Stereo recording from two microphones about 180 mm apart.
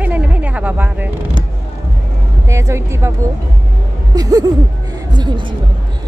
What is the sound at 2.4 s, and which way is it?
Speech, 15° right (ahead or behind).